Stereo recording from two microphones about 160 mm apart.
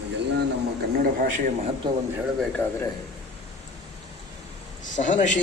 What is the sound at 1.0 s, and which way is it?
Speech, 55° right (ahead or behind).